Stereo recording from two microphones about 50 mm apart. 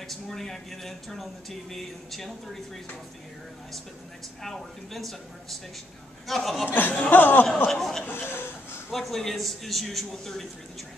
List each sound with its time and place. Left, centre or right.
0.1 s speech: centre
4.4 s speech: centre
6.7 s speech: left
7.7 s speech: centre
8.0 s chuckle: left
8.9 s speech: centre